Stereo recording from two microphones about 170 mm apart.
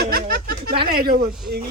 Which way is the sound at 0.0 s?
65° right (ahead or behind).